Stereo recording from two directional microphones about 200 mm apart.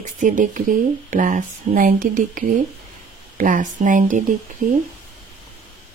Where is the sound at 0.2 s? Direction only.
40° right (ahead or behind).